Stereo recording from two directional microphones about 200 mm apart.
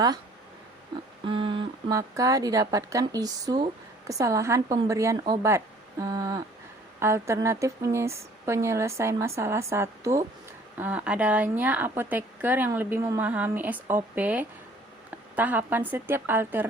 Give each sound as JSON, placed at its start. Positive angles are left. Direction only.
{"t": 1.2, "sound": "a woman's voice", "side_deg": -25}